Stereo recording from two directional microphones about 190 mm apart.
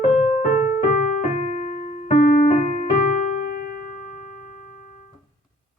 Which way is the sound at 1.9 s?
40° left (ahead or behind).